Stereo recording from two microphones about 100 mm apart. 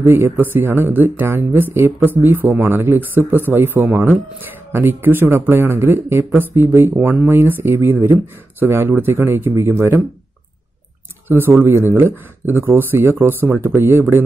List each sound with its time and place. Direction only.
0.0 s speech: 20° right (ahead or behind)
11.2 s speech: 20° right (ahead or behind)